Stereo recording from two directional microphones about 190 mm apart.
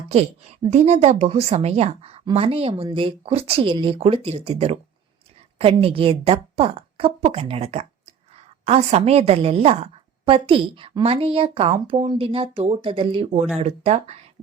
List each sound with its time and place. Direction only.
0.1 s a woman's voice: 35° right (ahead or behind)